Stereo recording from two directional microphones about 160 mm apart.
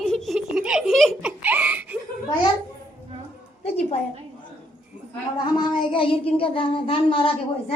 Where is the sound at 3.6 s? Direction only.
40° left (ahead or behind).